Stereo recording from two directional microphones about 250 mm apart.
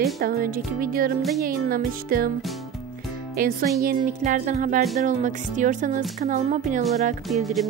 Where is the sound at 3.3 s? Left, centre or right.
Right.